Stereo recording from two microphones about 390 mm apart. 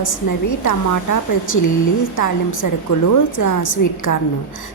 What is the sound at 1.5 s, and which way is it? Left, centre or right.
Speech, left.